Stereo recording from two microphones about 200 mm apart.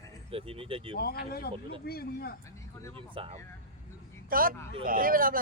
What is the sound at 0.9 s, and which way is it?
Speech, 50° left (ahead or behind).